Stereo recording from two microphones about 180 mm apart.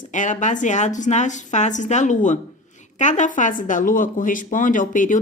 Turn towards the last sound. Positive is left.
turn(degrees=45)  # may be behind; listen again after turning